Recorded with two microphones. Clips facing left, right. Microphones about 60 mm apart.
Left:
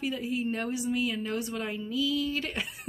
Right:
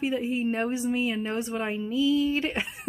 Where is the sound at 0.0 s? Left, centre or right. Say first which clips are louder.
Right 4 dB; right.